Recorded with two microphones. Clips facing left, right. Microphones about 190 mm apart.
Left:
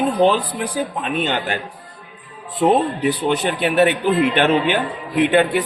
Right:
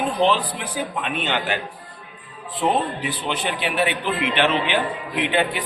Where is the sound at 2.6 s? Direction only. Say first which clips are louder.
Left 6 dB; 40° left (ahead or behind).